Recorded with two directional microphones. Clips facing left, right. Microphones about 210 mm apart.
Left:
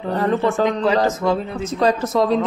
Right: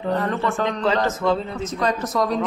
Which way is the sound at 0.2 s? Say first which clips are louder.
Left 5 dB; 35° left (ahead or behind).